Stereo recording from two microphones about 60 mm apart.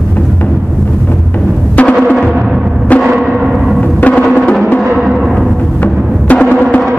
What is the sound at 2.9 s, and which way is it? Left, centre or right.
Timpani, left.